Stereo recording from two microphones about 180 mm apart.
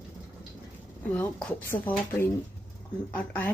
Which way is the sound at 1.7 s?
15° left (ahead or behind).